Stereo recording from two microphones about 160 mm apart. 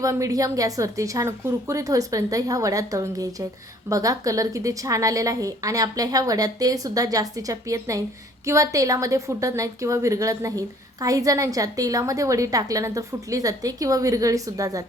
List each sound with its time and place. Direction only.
0.0 s a woman's voice: 20° right (ahead or behind)